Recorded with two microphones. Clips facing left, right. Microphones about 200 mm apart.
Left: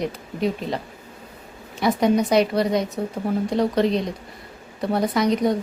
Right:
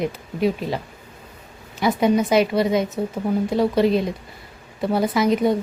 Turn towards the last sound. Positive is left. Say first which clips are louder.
# right 1 dB
turn(degrees=-5)  # may be behind; listen again after turning